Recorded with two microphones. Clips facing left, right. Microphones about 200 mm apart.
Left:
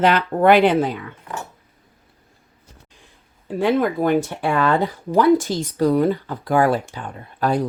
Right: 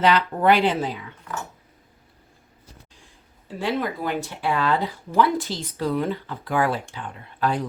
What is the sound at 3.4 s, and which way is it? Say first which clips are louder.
Speech: left 7 dB; 50° left (ahead or behind).